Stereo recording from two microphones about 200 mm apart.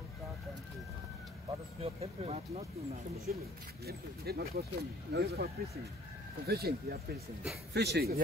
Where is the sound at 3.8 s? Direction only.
50° right (ahead or behind).